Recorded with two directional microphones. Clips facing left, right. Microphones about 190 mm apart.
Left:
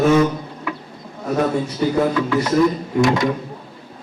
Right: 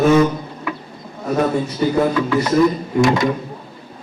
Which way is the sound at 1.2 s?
25° right (ahead or behind).